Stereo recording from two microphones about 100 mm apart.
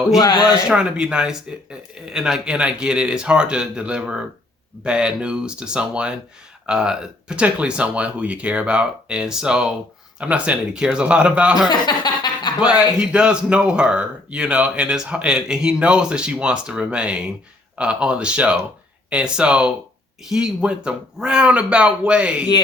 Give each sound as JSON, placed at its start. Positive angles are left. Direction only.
{"t": 0.2, "sound": "speech", "side_deg": 45}
{"t": 0.7, "sound": "speech", "side_deg": -10}
{"t": 11.7, "sound": "chuckle", "side_deg": 45}
{"t": 13.0, "sound": "speech", "side_deg": -10}